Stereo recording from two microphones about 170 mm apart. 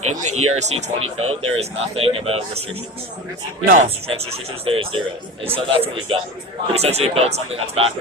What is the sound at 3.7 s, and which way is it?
Speech, 40° right (ahead or behind).